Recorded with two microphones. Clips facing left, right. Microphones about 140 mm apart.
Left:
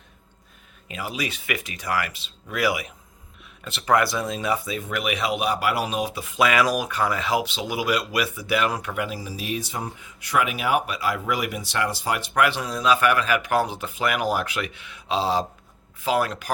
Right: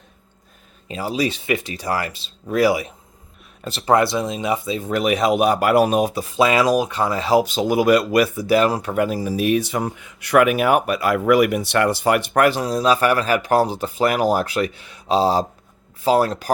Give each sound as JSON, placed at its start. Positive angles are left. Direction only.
{"t": 0.9, "sound": "speech", "side_deg": -30}